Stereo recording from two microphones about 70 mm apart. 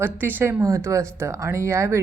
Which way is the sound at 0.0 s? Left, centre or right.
Right.